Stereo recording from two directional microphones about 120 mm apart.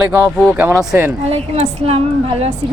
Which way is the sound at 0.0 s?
15° right (ahead or behind).